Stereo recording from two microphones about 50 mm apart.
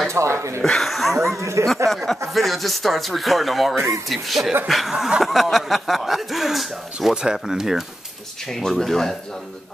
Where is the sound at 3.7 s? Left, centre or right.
Right.